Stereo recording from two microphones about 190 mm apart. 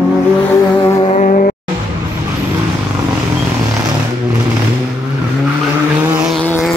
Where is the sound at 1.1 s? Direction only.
40° left (ahead or behind).